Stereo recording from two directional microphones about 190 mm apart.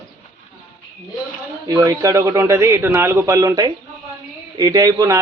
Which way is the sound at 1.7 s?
15° right (ahead or behind).